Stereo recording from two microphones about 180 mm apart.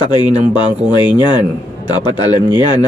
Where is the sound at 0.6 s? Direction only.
25° left (ahead or behind).